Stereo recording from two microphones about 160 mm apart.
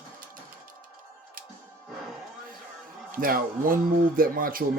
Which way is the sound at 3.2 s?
60° right (ahead or behind).